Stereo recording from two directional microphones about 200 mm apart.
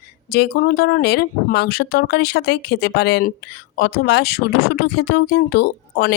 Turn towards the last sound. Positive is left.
turn(degrees=55)  # may be behind; listen again after turning